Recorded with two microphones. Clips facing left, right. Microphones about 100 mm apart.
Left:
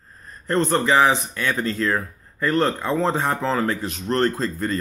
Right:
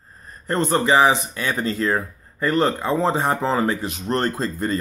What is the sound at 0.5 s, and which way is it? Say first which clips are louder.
Speech: right 1 dB; 10° right (ahead or behind).